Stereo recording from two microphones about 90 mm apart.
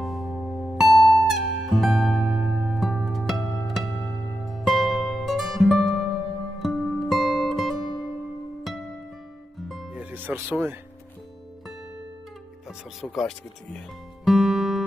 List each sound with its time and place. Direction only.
0.0 s music: centre (ahead or behind)
9.9 s music: 20° right (ahead or behind)
12.6 s speech: centre (ahead or behind)
14.2 s music: 5° right (ahead or behind)